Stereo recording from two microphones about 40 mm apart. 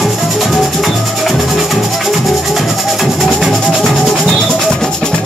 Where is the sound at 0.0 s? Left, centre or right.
Centre.